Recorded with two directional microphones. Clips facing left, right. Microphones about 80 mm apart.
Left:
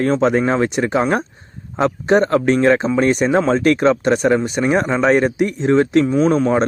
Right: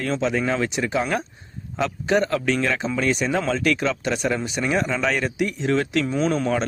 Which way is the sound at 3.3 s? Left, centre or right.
Left.